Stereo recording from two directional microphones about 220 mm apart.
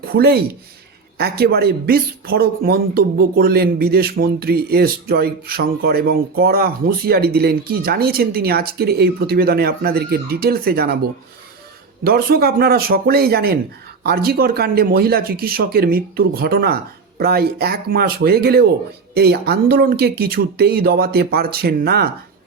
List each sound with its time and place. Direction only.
0.0 s speech: 45° right (ahead or behind)
12.0 s speech: 45° right (ahead or behind)